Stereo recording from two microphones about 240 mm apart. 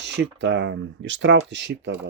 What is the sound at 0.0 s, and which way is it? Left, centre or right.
Speech, right.